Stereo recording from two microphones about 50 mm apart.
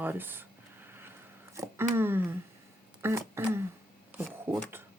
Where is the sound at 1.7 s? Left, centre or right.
Right.